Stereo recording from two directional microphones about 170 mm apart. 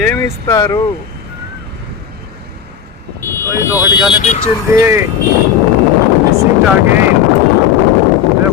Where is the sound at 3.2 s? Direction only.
15° left (ahead or behind).